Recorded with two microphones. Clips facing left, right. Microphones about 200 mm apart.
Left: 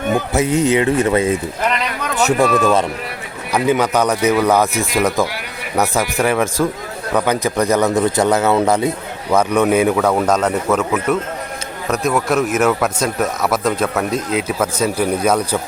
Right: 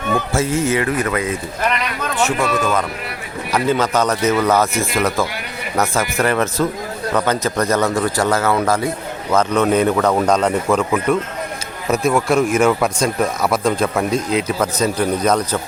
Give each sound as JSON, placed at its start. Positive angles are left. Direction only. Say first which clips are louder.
{"t": 0.1, "sound": "speech", "louder": "left 2 dB", "side_deg": 15}
{"t": 2.1, "sound": "speech", "louder": "left 4 dB", "side_deg": 40}
{"t": 3.5, "sound": "a man's voice", "louder": "left 2 dB", "side_deg": 15}
{"t": 6.2, "sound": "a man's voice", "louder": "left 1 dB", "side_deg": 10}